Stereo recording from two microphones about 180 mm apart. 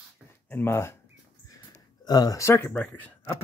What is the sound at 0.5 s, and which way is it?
Speech, 10° left (ahead or behind).